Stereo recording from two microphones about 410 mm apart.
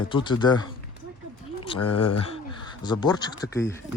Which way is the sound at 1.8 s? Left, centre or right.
Left.